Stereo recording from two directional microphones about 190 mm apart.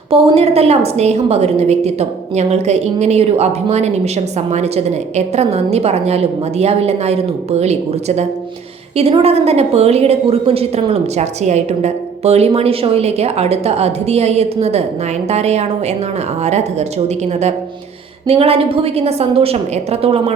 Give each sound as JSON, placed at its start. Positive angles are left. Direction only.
{"t": 0.1, "sound": "a woman's voice", "side_deg": -35}
{"t": 18.3, "sound": "a woman's voice", "side_deg": -30}